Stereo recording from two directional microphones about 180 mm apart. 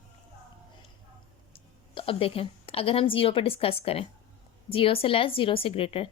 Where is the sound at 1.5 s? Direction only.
30° left (ahead or behind).